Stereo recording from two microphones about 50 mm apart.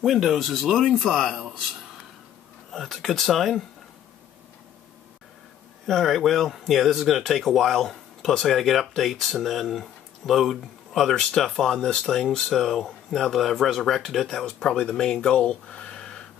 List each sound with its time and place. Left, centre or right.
0.0 s speech: centre
2.7 s speech: centre
5.9 s speech: centre